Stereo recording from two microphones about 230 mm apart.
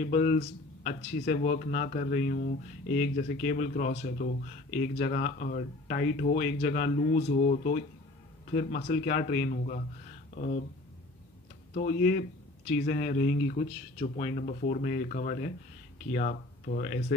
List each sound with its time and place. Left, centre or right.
0.0 s speech: left
11.7 s speech: left